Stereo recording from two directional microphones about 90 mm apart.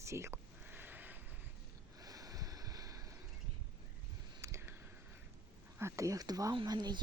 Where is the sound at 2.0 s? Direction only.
45° right (ahead or behind).